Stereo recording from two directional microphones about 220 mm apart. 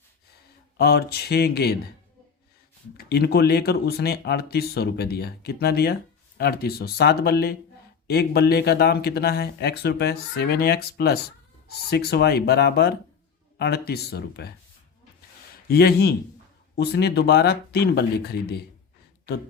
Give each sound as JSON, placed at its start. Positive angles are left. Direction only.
{"t": 0.8, "sound": "speech", "side_deg": 45}
{"t": 3.0, "sound": "speech", "side_deg": 45}
{"t": 15.7, "sound": "speech", "side_deg": 45}